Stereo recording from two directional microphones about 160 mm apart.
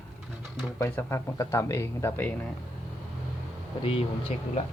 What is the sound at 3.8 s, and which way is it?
Speech, 35° left (ahead or behind).